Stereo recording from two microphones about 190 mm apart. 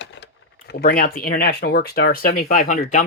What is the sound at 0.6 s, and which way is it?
Speech, 50° left (ahead or behind).